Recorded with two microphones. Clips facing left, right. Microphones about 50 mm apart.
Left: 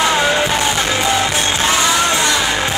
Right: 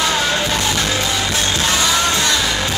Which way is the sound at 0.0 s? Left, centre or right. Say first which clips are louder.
Left 4 dB; left.